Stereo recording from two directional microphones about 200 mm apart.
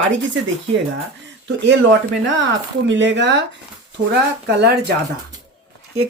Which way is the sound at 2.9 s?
65° right (ahead or behind).